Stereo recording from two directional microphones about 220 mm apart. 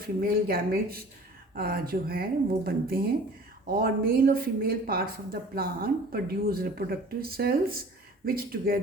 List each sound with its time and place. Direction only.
0.0 s a woman's voice: 40° right (ahead or behind)